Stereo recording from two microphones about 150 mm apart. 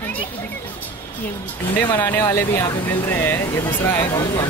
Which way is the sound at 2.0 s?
15° left (ahead or behind).